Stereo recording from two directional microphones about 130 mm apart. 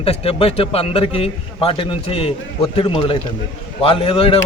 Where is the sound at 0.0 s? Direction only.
50° left (ahead or behind).